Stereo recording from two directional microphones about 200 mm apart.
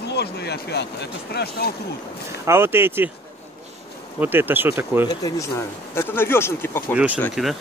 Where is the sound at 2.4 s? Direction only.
10° right (ahead or behind).